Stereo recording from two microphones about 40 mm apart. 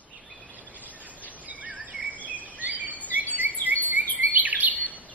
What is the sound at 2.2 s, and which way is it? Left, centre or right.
Bird vocalization, right.